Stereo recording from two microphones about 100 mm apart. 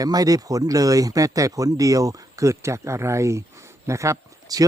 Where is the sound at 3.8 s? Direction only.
30° right (ahead or behind).